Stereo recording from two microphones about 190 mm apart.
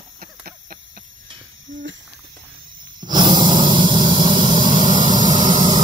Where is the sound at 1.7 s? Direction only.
80° right.